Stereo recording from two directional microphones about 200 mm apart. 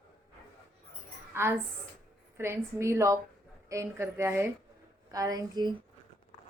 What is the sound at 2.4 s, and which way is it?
A woman's voice, 15° right (ahead or behind).